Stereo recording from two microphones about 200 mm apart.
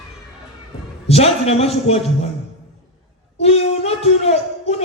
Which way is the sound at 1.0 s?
30° left (ahead or behind).